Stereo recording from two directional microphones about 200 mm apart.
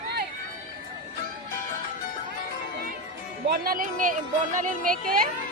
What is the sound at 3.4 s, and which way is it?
Speech, 50° right (ahead or behind).